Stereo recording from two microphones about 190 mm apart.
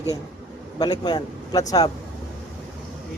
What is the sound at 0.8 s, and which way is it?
Speech, 20° left (ahead or behind).